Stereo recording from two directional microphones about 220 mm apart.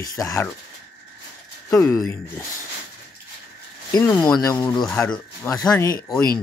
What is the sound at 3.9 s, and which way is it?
Speech, 20° left (ahead or behind).